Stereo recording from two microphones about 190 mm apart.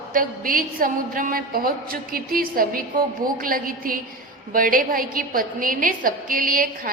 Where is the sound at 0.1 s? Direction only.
45° right (ahead or behind).